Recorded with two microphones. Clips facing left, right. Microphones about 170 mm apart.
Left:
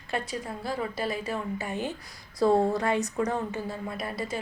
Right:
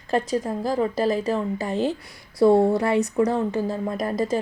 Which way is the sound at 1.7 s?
90° right.